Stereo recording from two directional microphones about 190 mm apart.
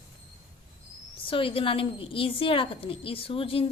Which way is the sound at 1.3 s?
30° left (ahead or behind).